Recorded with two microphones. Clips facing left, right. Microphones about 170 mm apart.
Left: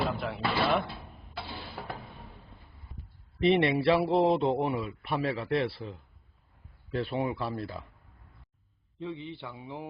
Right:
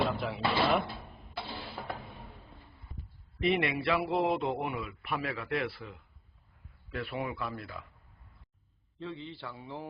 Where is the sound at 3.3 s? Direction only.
30° left (ahead or behind).